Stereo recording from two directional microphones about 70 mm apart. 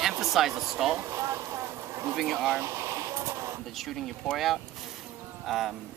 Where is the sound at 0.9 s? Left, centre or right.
Right.